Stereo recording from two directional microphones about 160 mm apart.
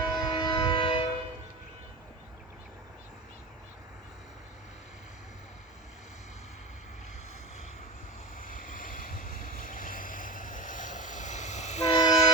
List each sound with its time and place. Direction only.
0.0 s train: 25° left (ahead or behind)
8.4 s vehicle: 60° left (ahead or behind)
11.9 s vehicle: 25° left (ahead or behind)